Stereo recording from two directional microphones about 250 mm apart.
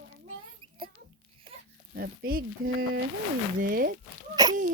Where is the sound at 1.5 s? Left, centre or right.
Centre.